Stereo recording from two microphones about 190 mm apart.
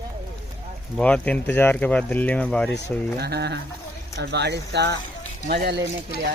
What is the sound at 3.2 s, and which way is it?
Speech, 60° right (ahead or behind).